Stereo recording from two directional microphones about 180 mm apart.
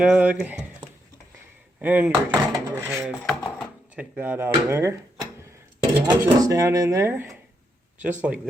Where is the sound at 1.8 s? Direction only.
10° right (ahead or behind).